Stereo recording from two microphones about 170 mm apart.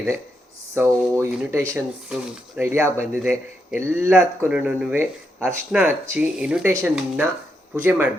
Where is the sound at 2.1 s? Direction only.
5° right (ahead or behind).